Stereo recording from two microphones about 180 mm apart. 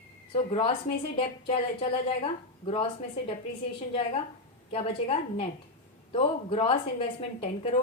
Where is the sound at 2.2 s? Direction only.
30° left (ahead or behind).